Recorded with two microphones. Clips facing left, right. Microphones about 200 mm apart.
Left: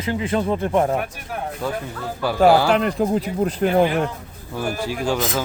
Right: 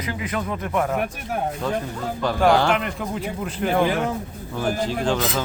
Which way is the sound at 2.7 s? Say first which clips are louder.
Left 5 dB; 35° left (ahead or behind).